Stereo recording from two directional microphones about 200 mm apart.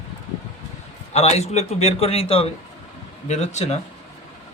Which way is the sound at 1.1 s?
30° left (ahead or behind).